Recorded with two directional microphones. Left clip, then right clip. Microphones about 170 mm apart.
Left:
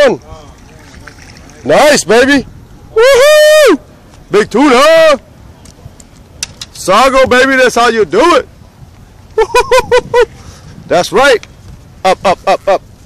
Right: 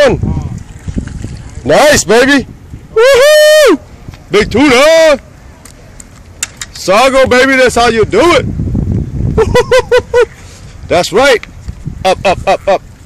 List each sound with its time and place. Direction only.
1.0 s a sound: 10° left (ahead or behind)
2.9 s a man's voice: 10° left (ahead or behind)
6.6 s a man's voice: 10° left (ahead or behind)